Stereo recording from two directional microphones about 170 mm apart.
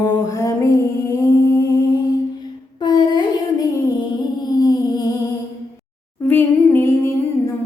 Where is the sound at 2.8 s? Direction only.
25° left (ahead or behind).